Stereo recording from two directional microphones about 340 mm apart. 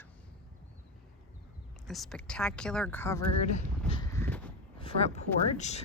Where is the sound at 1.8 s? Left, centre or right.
Centre.